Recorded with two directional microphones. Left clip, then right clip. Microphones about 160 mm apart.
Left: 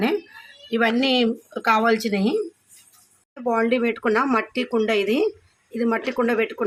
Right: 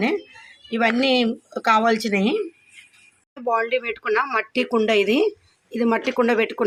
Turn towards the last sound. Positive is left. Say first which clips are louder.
# right 2 dB
turn(degrees=-20)  # may be behind; listen again after turning